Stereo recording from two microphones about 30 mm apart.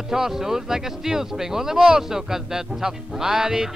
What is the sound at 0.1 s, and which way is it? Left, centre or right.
Speech, centre.